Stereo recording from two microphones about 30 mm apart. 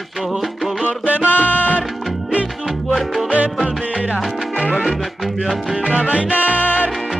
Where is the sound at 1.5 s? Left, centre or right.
Left.